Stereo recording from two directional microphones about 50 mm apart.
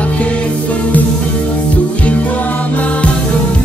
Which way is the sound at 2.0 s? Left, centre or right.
Left.